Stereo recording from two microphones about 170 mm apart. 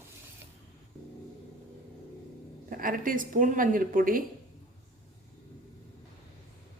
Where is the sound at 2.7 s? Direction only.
55° right (ahead or behind).